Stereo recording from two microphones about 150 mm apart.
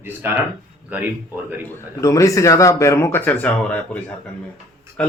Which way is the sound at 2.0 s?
20° left (ahead or behind).